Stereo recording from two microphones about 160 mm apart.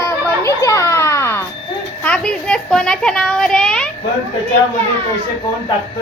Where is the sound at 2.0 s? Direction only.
5° left (ahead or behind).